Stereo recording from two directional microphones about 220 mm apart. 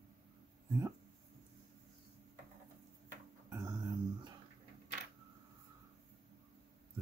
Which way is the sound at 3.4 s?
15° right (ahead or behind).